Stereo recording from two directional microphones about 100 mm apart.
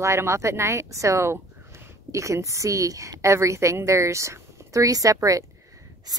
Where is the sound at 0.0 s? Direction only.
30° right (ahead or behind).